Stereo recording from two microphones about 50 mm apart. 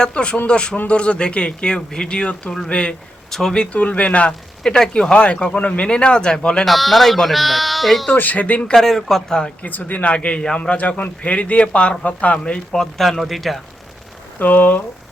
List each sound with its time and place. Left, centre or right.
0.0 s a man's voice: left
3.7 s a man's voice: left
6.7 s speech: centre
8.1 s speech: left
8.7 s speech: centre
9.6 s a man's voice: left
12.7 s speech: centre
14.3 s speech: left